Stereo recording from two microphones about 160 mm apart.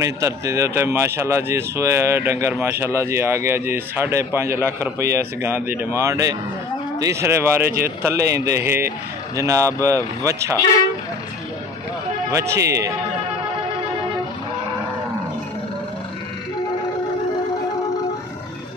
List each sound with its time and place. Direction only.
0.0 s speech: 20° right (ahead or behind)
12.3 s speech: 20° right (ahead or behind)